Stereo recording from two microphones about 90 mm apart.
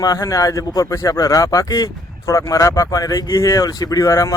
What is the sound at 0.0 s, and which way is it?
Speech, 40° left (ahead or behind).